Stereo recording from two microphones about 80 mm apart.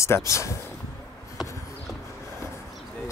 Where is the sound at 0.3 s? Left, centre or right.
Left.